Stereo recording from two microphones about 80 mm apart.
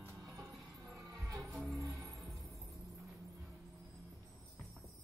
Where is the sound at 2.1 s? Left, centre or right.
Centre.